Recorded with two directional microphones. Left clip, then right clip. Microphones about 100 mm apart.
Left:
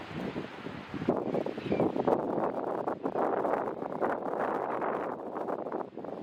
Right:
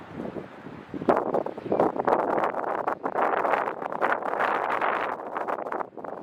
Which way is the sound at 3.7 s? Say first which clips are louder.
Right 5 dB; 45° right (ahead or behind).